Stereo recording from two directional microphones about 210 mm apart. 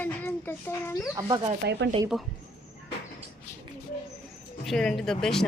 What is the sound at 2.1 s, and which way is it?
Speech, centre (ahead or behind).